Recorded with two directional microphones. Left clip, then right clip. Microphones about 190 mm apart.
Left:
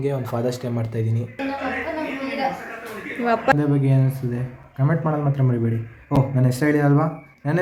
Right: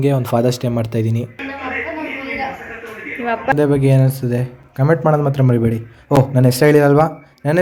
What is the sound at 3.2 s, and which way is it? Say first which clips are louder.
Speech: right 1 dB; 15° left (ahead or behind).